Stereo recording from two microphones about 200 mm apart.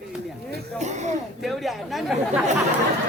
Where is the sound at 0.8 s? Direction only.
35° right (ahead or behind).